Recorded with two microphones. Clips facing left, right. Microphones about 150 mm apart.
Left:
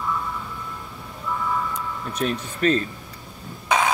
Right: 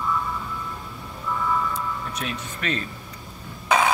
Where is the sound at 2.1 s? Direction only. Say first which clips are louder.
Left 6 dB; 35° left (ahead or behind).